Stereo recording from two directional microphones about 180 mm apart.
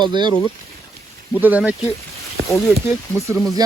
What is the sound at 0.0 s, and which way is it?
Speech, 25° right (ahead or behind).